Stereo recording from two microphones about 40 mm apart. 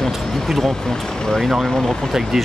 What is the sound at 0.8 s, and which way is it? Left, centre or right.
Speech, centre.